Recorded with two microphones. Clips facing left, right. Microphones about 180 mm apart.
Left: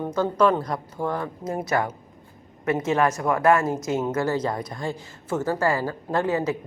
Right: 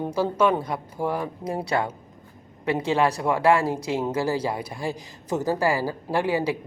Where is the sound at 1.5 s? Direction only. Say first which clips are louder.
Left 1 dB; 30° right (ahead or behind).